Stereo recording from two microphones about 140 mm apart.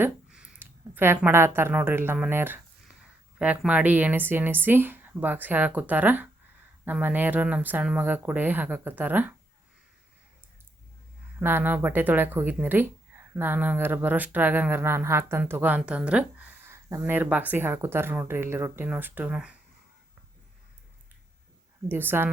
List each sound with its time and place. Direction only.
0.0 s speech: 5° right (ahead or behind)
11.3 s speech: 15° right (ahead or behind)
21.8 s speech: 15° right (ahead or behind)